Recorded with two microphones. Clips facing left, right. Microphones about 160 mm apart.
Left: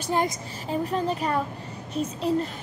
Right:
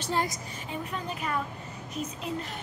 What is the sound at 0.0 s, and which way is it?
Speech, 20° left (ahead or behind).